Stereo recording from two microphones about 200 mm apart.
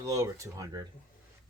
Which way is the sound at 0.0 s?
15° right (ahead or behind).